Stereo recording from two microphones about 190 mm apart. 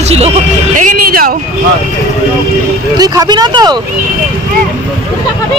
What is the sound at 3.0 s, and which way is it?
Speech, 20° right (ahead or behind).